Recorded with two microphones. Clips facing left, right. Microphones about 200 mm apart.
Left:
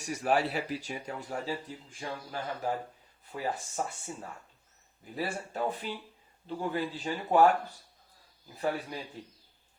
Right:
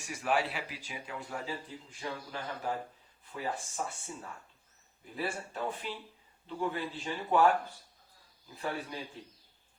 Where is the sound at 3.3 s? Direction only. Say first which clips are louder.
Left 3 dB; 50° left (ahead or behind).